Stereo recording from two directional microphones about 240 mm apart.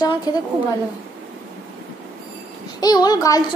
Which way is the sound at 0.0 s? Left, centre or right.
Centre.